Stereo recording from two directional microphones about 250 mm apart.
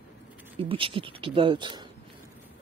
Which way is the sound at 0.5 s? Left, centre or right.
Right.